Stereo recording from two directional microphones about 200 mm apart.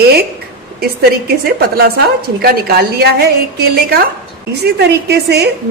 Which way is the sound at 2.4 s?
50° right (ahead or behind).